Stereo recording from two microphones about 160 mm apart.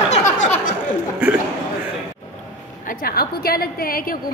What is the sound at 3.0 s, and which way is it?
A woman's voice, 70° left (ahead or behind).